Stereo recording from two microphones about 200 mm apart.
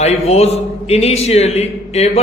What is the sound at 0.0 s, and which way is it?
A man's voice, 30° left (ahead or behind).